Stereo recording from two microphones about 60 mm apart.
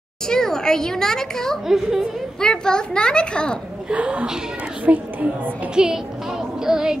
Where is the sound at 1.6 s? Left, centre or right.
Centre.